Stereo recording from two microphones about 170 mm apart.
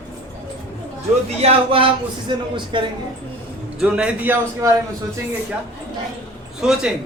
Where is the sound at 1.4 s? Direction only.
30° right (ahead or behind).